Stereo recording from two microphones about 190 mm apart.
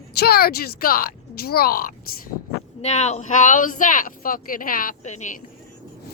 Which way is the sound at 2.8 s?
35° left (ahead or behind).